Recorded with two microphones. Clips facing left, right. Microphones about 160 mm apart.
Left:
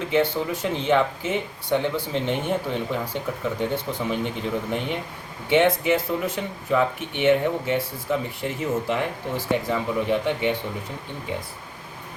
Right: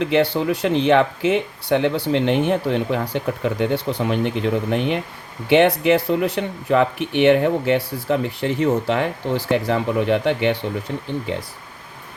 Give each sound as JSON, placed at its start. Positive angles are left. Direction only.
{"t": 0.0, "sound": "speech", "side_deg": -75}